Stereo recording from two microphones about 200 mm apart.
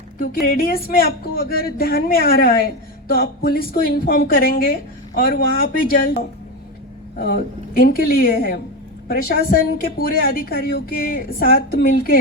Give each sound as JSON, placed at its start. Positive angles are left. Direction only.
{"t": 0.2, "sound": "speech", "side_deg": 45}